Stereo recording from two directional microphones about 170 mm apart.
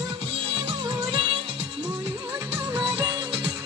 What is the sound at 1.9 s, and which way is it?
Music, 15° right (ahead or behind).